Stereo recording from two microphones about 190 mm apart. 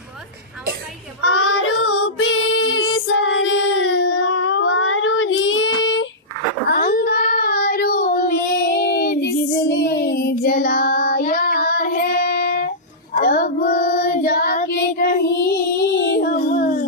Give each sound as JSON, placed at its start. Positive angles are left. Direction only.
{"t": 1.3, "sound": "child singing", "side_deg": 90}
{"t": 6.7, "sound": "child singing", "side_deg": 45}